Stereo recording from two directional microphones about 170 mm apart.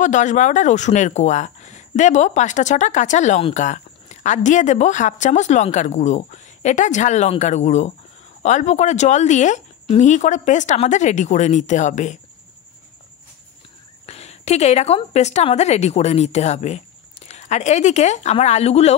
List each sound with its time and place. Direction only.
0.0 s speech: 45° left (ahead or behind)
14.0 s a woman's voice: 40° left (ahead or behind)